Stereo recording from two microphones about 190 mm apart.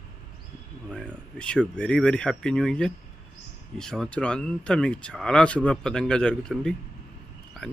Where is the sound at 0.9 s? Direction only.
5° left (ahead or behind).